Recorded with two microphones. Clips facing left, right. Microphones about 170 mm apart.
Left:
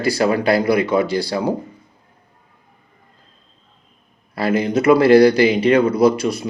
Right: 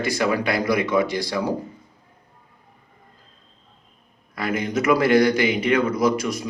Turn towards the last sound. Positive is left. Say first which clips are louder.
# left 6 dB
turn(degrees=30)  # may be behind; listen again after turning